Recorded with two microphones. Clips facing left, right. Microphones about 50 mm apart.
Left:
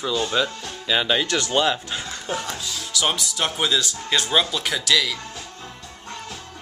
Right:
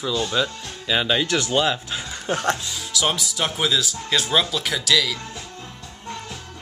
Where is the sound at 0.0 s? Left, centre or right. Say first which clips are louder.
Even; centre.